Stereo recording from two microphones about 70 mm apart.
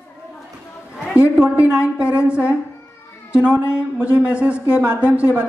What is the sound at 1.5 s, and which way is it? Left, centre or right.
A man's voice, centre.